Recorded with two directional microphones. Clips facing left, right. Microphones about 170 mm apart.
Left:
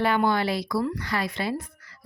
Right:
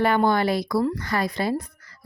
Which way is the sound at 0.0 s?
45° right (ahead or behind).